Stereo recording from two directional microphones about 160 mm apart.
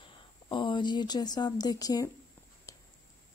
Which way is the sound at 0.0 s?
30° left (ahead or behind).